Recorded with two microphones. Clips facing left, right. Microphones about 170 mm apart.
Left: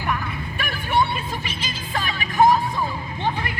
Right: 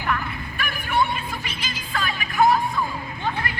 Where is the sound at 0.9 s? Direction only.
20° left (ahead or behind).